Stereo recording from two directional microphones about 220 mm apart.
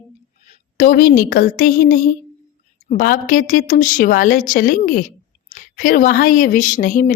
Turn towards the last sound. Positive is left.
turn(degrees=35)  # may be behind; listen again after turning